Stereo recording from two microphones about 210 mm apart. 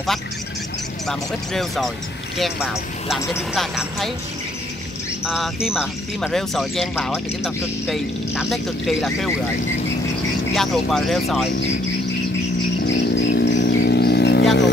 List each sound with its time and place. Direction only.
1.0 s speech: centre (ahead or behind)
5.2 s speech: centre (ahead or behind)
10.5 s speech: centre (ahead or behind)
12.8 s a sound: 55° left (ahead or behind)